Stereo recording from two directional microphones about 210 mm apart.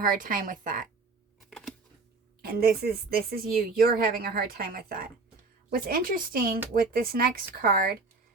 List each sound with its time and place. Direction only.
0.0 s a woman's voice: 40° right (ahead or behind)
1.5 s typewriter: centre (ahead or behind)
2.4 s a woman's voice: 45° right (ahead or behind)